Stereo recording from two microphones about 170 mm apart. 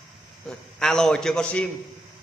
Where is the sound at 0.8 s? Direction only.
Centre (ahead or behind).